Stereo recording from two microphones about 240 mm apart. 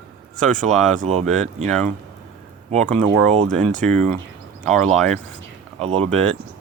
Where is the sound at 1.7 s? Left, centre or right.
Centre.